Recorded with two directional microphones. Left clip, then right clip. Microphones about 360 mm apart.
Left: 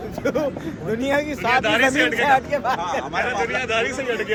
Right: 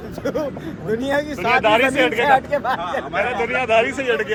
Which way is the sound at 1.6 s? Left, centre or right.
Centre.